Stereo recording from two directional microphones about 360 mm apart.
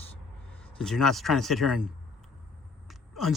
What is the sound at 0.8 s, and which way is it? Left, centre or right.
A man's voice, centre.